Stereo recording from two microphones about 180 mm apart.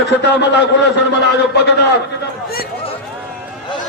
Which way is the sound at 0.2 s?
75° left (ahead or behind).